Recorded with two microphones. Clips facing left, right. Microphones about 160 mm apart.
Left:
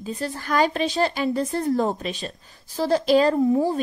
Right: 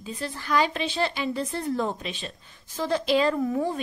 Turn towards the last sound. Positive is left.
turn(degrees=30)  # may be behind; listen again after turning